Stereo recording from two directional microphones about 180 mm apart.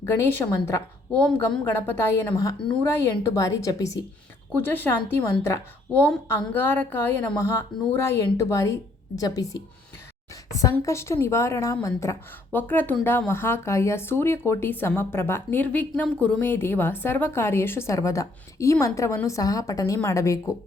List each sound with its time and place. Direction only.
0.0 s a woman's voice: 15° left (ahead or behind)